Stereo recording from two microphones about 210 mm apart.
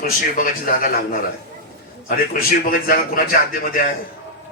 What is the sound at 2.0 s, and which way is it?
A man's voice, 40° left (ahead or behind).